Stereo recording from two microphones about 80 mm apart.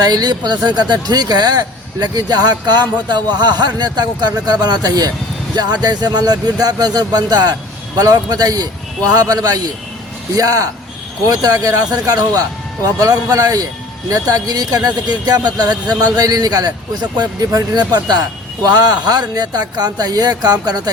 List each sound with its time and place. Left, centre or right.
0.0 s speech: right